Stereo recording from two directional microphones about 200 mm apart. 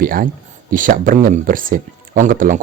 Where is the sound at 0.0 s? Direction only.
45° right (ahead or behind).